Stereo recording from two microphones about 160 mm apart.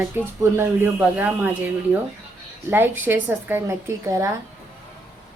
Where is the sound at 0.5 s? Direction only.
15° right (ahead or behind).